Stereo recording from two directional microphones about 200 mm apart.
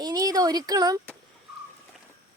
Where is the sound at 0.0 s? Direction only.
20° right (ahead or behind).